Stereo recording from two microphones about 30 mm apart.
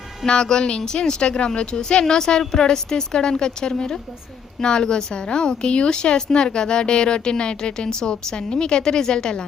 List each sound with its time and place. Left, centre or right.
0.3 s a woman's voice: left